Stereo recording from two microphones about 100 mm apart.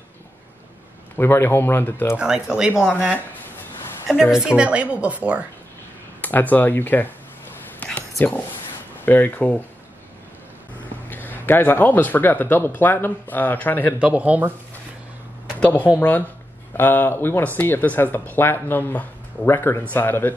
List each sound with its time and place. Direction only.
1.1 s speech: 20° left (ahead or behind)
2.1 s a woman's voice: 5° right (ahead or behind)
4.1 s a woman's voice: 5° right (ahead or behind)
6.2 s speech: 15° left (ahead or behind)
7.8 s whispering: 15° left (ahead or behind)
8.2 s speech: 20° left (ahead or behind)
11.1 s speech: 20° left (ahead or behind)
13.9 s a woman's voice: 15° right (ahead or behind)
15.5 s speech: 15° left (ahead or behind)